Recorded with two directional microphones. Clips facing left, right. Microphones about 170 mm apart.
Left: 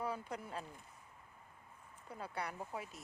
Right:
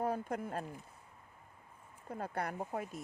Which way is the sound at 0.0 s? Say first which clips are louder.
Right 6 dB; 50° right (ahead or behind).